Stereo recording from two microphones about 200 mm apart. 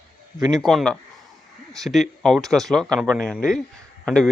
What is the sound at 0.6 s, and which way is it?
A man's voice, centre (ahead or behind).